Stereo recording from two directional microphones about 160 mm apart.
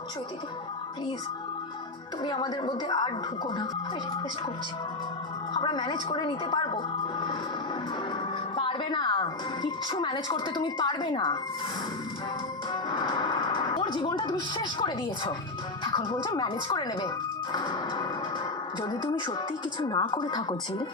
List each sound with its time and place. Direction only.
2.2 s a woman's voice: 30° left (ahead or behind)
5.5 s a woman's voice: 30° left (ahead or behind)
8.5 s a woman's voice: 30° left (ahead or behind)
12.7 s a woman's voice: 25° left (ahead or behind)